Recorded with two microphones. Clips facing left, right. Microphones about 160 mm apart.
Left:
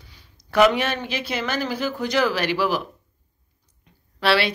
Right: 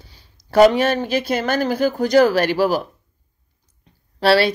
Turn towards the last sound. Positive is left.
turn(degrees=-40)  # may be behind; listen again after turning